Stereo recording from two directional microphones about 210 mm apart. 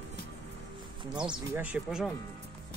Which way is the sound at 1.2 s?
10° right (ahead or behind).